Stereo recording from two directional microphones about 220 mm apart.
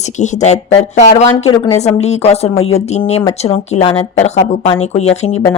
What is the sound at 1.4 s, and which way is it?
Speech, 15° left (ahead or behind).